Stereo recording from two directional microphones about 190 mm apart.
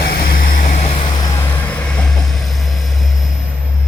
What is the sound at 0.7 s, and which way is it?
Vehicle, 30° left (ahead or behind).